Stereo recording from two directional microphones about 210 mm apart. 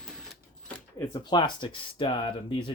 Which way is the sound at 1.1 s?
20° left (ahead or behind).